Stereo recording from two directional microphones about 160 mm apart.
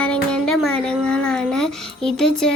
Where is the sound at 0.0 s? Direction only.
5° left (ahead or behind).